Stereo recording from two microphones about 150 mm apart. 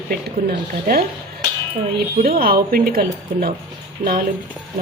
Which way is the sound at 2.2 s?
80° right.